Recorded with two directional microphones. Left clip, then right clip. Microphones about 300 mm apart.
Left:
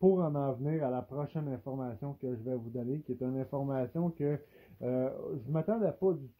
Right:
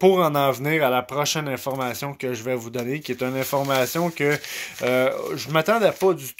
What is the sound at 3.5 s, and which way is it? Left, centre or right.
Speech, right.